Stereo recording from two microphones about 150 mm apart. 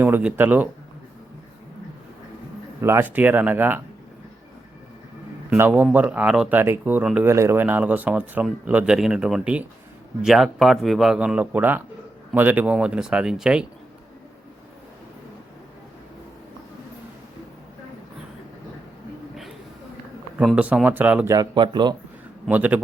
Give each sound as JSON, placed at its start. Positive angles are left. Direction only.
{"t": 0.0, "sound": "speech", "side_deg": -10}
{"t": 2.8, "sound": "speech", "side_deg": -15}
{"t": 5.5, "sound": "speech", "side_deg": -10}
{"t": 20.4, "sound": "speech", "side_deg": -5}
{"t": 21.3, "sound": "speech", "side_deg": -30}
{"t": 22.4, "sound": "speech", "side_deg": -10}